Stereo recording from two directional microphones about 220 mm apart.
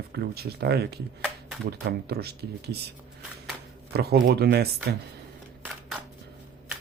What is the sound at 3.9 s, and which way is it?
Speech, 45° right (ahead or behind).